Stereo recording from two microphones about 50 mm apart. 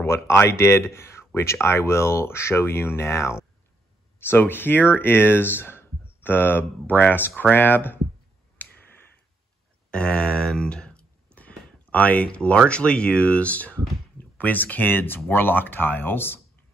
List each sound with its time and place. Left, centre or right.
0.0 s speech: left
4.2 s speech: left
8.6 s finger snapping: left
9.8 s speech: centre
11.3 s a sound: left
12.6 s speech: left